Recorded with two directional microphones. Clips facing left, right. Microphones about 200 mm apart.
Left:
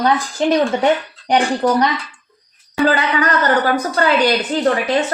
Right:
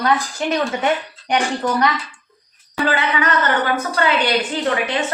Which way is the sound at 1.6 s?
35° left (ahead or behind).